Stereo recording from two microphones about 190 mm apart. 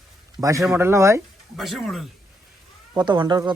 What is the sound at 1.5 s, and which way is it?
Speech, centre (ahead or behind).